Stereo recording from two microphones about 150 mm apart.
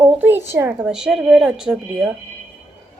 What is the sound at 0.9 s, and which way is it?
Speech, 5° right (ahead or behind).